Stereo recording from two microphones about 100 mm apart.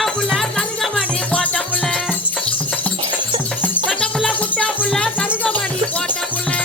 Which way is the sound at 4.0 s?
10° left (ahead or behind).